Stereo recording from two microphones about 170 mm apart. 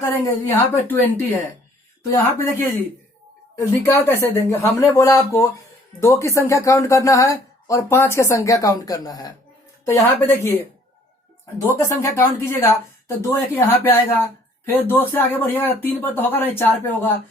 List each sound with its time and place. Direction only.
0.0 s speech: 15° left (ahead or behind)
3.6 s speech: 15° left (ahead or behind)
11.8 s speech: 15° left (ahead or behind)